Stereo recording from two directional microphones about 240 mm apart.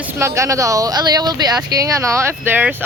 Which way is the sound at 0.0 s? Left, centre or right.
Centre.